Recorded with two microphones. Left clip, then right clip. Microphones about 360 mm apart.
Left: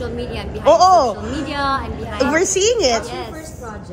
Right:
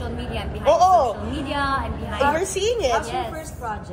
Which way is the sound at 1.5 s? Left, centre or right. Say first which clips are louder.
Left 3 dB; centre.